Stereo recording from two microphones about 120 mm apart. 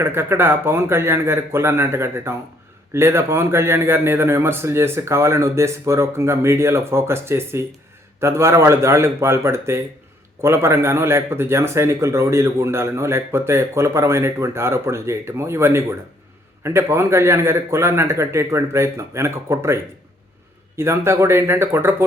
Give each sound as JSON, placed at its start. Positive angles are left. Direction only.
{"t": 0.0, "sound": "a man's voice", "side_deg": -20}